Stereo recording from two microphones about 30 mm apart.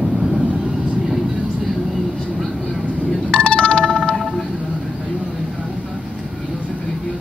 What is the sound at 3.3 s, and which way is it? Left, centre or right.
Music, left.